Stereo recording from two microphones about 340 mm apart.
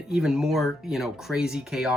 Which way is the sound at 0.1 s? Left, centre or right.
Centre.